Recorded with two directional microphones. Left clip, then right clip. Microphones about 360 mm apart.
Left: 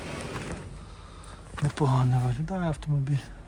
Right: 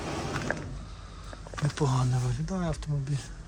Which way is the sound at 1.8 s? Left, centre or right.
Left.